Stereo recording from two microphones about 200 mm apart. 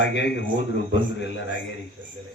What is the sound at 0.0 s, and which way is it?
Speech, 60° left (ahead or behind).